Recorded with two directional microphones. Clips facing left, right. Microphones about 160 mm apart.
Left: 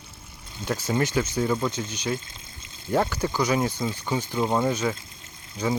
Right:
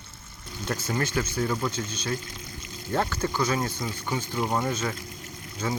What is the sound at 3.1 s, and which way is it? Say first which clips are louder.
Speech: left 2 dB; 15° left (ahead or behind).